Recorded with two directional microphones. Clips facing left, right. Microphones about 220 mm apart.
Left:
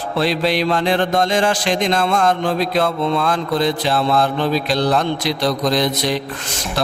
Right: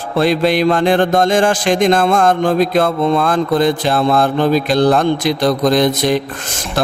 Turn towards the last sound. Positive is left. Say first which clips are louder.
# right 5 dB
turn(degrees=-50)  # may be behind; listen again after turning